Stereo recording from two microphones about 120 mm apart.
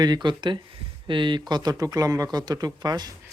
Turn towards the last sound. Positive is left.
turn(degrees=-35)  # may be behind; listen again after turning